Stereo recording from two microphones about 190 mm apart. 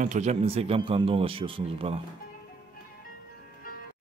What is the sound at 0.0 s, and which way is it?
Speech, 40° right (ahead or behind).